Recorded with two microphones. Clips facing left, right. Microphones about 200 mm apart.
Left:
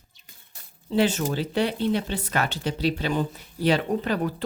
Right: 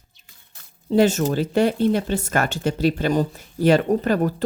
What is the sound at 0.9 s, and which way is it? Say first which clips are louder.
Speech: right 5 dB; 45° right (ahead or behind).